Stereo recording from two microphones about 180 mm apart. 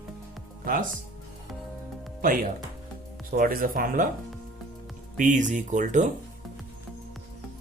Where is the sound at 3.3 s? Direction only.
50° right (ahead or behind).